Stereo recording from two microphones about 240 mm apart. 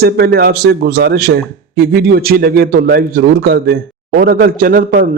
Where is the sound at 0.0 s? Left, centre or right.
Right.